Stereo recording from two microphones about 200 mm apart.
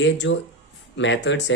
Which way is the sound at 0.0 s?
65° left (ahead or behind).